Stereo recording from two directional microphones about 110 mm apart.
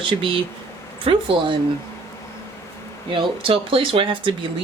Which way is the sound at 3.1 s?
50° right (ahead or behind).